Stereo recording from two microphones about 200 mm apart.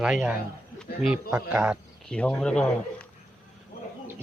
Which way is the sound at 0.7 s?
Centre (ahead or behind).